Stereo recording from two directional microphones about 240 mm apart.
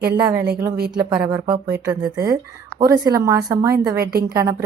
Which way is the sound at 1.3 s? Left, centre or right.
Centre.